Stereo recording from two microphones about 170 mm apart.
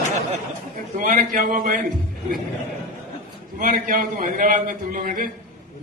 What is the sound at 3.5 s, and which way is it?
A man's voice, 55° right (ahead or behind).